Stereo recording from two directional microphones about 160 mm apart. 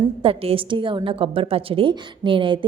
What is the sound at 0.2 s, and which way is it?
A woman's voice, 35° right (ahead or behind).